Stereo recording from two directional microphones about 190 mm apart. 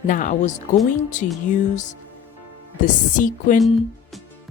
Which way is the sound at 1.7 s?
40° left (ahead or behind).